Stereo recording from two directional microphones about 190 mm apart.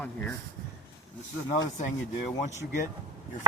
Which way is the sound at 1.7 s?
40° left (ahead or behind).